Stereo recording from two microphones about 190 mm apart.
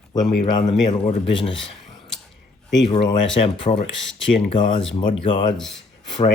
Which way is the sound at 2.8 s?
25° left (ahead or behind).